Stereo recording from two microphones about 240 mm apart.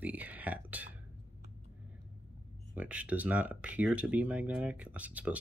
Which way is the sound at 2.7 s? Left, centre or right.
Centre.